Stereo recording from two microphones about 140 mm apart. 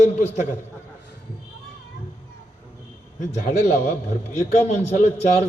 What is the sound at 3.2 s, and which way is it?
A man's voice, 60° left (ahead or behind).